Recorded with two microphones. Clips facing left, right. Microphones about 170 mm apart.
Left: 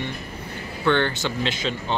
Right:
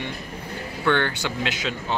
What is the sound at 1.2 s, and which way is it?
Speech, 10° right (ahead or behind).